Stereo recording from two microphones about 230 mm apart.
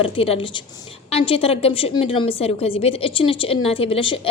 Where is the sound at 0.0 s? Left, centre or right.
Left.